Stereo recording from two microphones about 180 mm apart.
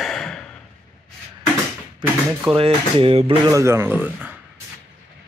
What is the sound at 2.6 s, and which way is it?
Speech, 30° right (ahead or behind).